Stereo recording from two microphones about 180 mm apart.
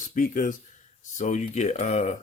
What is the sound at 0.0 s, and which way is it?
Speech, 45° left (ahead or behind).